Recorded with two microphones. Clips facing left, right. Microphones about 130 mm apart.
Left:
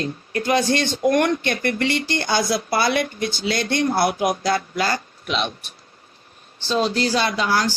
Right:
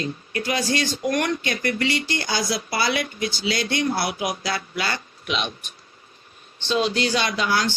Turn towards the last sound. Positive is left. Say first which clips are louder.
# left 2 dB
turn(degrees=40)  # may be behind; listen again after turning